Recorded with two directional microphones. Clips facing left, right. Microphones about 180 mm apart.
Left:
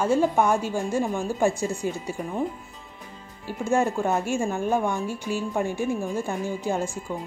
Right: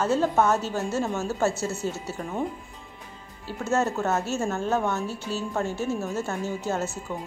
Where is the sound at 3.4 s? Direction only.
10° left (ahead or behind).